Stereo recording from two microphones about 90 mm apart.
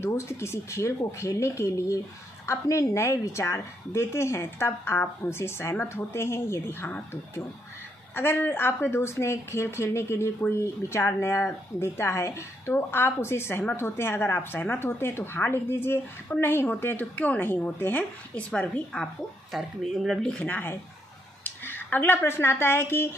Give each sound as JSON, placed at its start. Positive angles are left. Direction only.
{"t": 0.0, "sound": "a woman's voice", "side_deg": 30}
{"t": 18.3, "sound": "a woman's voice", "side_deg": 10}
{"t": 19.5, "sound": "speech", "side_deg": 0}
{"t": 20.4, "sound": "a woman's voice", "side_deg": 20}